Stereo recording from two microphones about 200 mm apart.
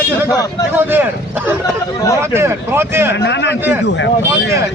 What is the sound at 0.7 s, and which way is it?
Speech, 10° right (ahead or behind).